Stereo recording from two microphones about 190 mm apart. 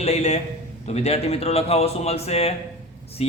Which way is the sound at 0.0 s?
35° left (ahead or behind).